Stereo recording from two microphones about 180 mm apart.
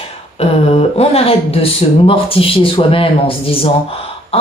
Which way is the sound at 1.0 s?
35° left (ahead or behind).